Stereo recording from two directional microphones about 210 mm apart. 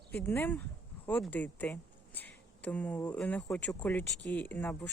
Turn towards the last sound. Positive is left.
turn(degrees=10)  # may be behind; listen again after turning